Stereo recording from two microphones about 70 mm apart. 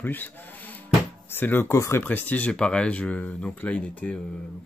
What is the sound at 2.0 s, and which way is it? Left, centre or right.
Speech, left.